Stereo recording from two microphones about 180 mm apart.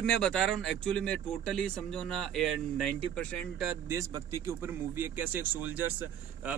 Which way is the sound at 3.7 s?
15° right (ahead or behind).